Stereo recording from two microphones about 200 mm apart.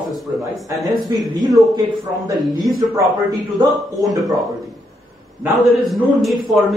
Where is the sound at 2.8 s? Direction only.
15° right (ahead or behind).